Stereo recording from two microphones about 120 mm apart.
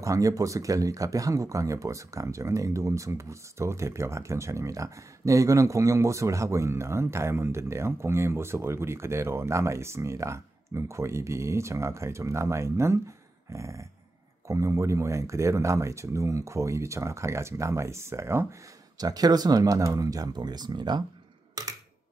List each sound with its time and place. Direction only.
0.0 s speech: 30° right (ahead or behind)